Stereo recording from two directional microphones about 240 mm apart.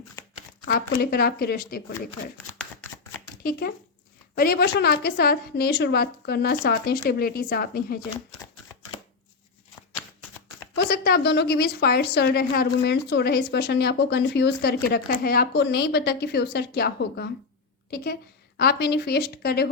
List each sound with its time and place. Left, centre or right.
0.7 s a woman's voice: left
4.4 s a woman's voice: left
10.8 s a woman's voice: left